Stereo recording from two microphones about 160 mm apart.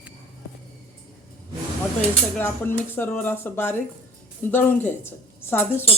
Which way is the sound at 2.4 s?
15° left (ahead or behind).